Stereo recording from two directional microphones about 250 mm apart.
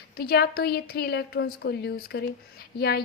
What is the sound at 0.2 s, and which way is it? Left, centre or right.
A woman's voice, left.